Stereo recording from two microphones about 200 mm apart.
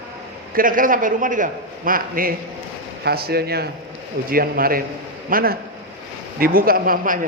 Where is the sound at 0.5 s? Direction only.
45° right (ahead or behind).